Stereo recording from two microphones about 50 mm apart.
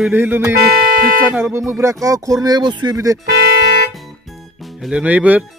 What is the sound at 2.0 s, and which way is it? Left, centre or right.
Speech, right.